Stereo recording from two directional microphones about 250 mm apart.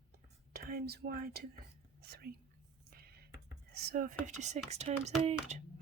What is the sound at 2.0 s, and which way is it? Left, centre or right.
Whispering, right.